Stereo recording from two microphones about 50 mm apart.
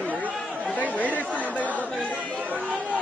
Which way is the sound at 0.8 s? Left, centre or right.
Left.